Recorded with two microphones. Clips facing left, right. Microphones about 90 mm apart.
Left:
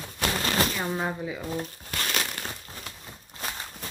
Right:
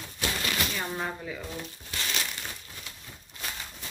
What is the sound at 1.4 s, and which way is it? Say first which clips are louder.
Speech: left 6 dB; 40° left (ahead or behind).